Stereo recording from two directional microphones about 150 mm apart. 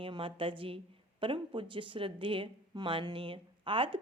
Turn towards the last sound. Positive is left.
turn(degrees=-35)  # may be behind; listen again after turning